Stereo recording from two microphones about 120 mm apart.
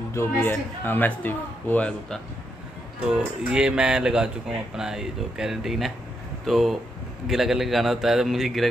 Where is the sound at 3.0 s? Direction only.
10° right (ahead or behind).